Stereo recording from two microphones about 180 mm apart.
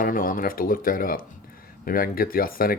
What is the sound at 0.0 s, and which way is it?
Speech, 50° left (ahead or behind).